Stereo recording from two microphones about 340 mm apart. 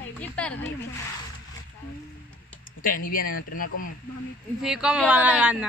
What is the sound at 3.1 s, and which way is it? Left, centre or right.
Speech, left.